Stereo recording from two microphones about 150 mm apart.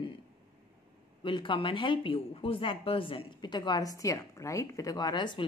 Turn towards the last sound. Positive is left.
turn(degrees=30)  # may be behind; listen again after turning